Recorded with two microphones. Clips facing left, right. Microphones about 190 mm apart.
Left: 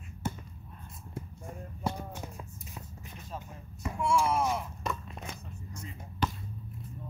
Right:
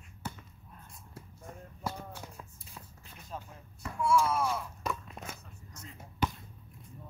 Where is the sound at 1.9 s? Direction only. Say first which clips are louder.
Left 3 dB; 15° left (ahead or behind).